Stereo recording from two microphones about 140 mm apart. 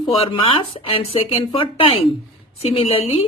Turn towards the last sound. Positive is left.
turn(degrees=45)  # may be behind; listen again after turning